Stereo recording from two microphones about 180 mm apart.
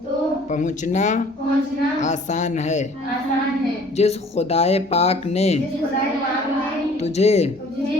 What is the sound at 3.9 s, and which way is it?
Speech, 35° left (ahead or behind).